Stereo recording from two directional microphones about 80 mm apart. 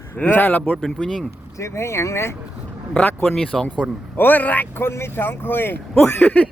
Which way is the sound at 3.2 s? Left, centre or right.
Centre.